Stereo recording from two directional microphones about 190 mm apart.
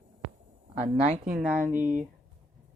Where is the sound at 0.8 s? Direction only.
35° right (ahead or behind).